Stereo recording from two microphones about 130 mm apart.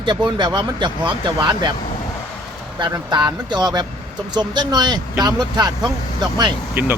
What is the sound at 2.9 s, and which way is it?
Speech, 35° right (ahead or behind).